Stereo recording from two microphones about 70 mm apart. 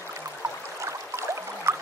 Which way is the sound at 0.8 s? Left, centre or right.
Right.